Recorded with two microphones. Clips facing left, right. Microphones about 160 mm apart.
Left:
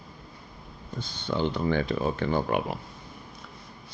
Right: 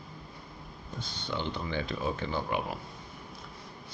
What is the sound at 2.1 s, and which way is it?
Speech, 60° left (ahead or behind).